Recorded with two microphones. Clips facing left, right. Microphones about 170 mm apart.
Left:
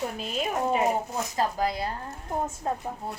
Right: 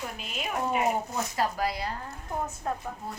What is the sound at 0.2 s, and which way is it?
Speech, 35° left (ahead or behind).